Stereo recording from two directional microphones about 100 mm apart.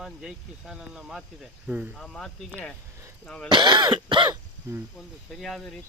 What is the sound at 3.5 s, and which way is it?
Throat clearing, 50° right (ahead or behind).